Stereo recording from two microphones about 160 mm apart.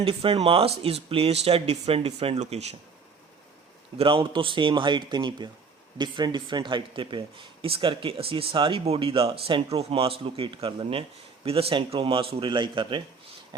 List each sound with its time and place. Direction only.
0.0 s speech: 35° right (ahead or behind)
3.9 s speech: 30° right (ahead or behind)
13.5 s a sound: 30° right (ahead or behind)